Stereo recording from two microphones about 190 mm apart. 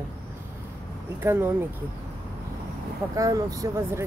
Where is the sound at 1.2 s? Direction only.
10° right (ahead or behind).